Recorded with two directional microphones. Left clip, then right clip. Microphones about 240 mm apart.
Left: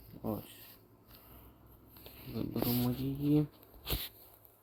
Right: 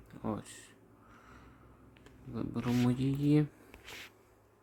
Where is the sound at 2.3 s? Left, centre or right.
Centre.